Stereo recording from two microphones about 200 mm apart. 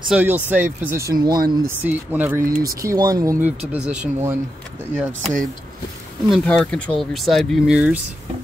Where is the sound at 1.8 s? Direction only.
10° right (ahead or behind).